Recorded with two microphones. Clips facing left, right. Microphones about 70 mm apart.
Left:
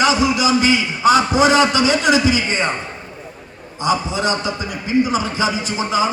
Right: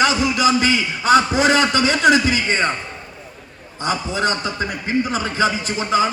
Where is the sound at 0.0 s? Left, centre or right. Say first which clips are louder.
Left 1 dB; right.